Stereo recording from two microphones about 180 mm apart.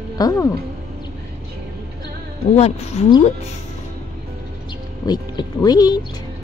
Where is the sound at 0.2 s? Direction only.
20° left (ahead or behind).